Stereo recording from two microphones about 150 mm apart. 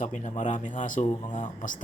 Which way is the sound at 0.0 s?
55° left (ahead or behind).